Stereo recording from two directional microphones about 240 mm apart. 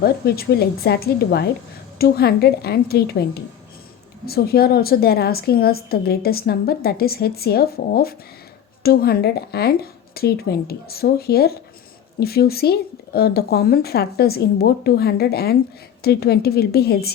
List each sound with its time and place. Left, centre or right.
0.0 s a woman's voice: left